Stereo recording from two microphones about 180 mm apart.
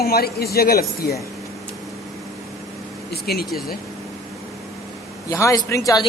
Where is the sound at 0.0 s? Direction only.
60° left (ahead or behind).